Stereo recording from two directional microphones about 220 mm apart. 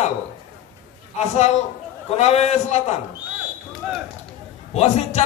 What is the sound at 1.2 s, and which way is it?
A man's voice, 30° left (ahead or behind).